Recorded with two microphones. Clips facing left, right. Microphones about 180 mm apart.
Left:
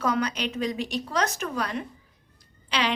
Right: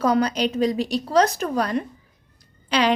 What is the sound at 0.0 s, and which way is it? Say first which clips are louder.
Speech: right 6 dB; 35° right (ahead or behind).